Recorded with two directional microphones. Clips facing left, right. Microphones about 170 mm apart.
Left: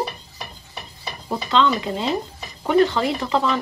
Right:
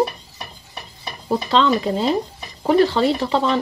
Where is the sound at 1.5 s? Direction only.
35° right (ahead or behind).